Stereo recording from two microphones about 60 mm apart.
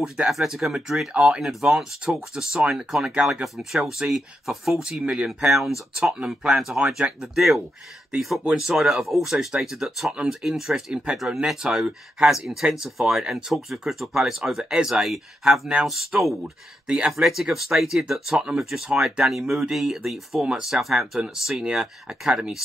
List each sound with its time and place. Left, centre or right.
0.3 s speech: centre
4.8 s speech: centre
5.5 s speech: centre
8.1 s speech: centre
16.1 s speech: right